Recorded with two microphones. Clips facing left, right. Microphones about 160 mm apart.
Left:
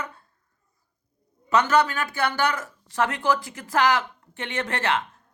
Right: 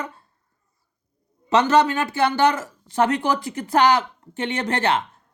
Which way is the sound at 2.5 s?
25° right (ahead or behind).